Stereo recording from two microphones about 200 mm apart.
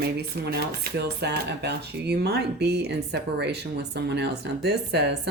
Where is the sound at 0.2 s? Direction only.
55° right (ahead or behind).